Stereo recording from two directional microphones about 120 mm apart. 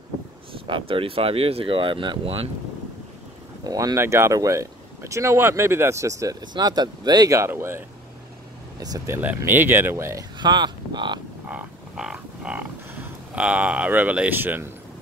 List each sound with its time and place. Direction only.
0.5 s speech: 45° right (ahead or behind)
3.6 s speech: 30° right (ahead or behind)
8.7 s speech: 30° right (ahead or behind)
9.1 s speech: 15° right (ahead or behind)
10.4 s speech: 40° right (ahead or behind)
11.4 s cattle: 10° right (ahead or behind)